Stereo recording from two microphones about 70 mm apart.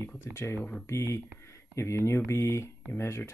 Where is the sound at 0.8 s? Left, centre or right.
Left.